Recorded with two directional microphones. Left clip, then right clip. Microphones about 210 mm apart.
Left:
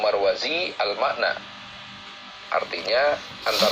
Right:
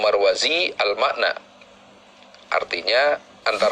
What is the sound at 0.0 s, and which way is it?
Speech, 35° right (ahead or behind).